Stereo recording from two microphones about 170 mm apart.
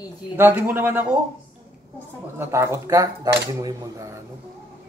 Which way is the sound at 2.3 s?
15° right (ahead or behind).